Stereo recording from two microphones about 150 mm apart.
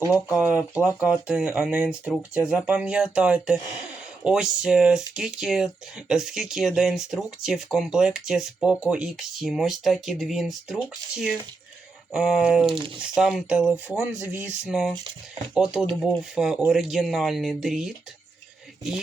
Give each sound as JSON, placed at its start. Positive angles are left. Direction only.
{"t": 0.3, "sound": "speech", "side_deg": -10}
{"t": 12.1, "sound": "speech", "side_deg": -5}
{"t": 12.6, "sound": "speech", "side_deg": -35}
{"t": 13.0, "sound": "speech", "side_deg": -5}